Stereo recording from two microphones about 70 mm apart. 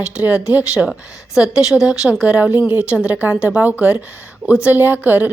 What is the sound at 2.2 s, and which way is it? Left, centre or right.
Speech, right.